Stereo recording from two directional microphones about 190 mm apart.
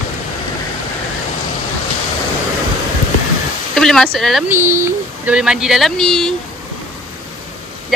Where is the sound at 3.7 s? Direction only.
5° left (ahead or behind).